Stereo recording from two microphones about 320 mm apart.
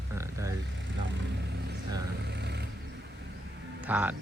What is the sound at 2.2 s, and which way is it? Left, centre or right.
Vehicle, right.